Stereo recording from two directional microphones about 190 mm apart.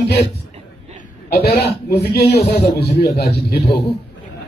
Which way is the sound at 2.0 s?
60° left (ahead or behind).